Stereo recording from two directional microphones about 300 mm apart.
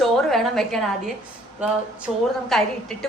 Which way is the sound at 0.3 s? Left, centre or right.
Centre.